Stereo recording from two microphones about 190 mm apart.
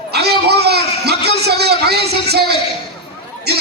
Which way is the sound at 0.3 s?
60° right (ahead or behind).